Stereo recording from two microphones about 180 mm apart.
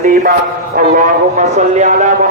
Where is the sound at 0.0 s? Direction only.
50° right (ahead or behind).